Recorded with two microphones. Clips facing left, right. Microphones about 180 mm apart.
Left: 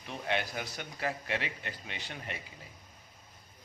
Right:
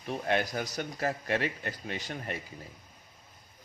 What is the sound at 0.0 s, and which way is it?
Speech, 45° right (ahead or behind).